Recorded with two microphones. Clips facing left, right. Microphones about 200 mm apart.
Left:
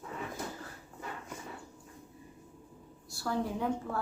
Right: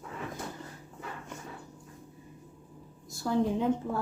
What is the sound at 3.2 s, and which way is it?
Speech, 20° right (ahead or behind).